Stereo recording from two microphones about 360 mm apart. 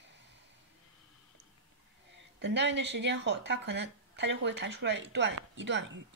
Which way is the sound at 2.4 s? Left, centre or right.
Right.